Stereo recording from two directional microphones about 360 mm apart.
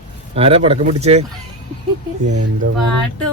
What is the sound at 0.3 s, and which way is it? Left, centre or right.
Speech, centre.